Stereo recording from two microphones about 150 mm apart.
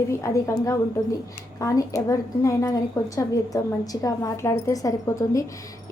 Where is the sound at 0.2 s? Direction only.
20° left (ahead or behind).